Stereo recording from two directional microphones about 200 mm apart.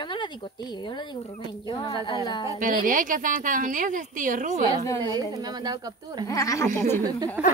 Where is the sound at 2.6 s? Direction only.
40° right (ahead or behind).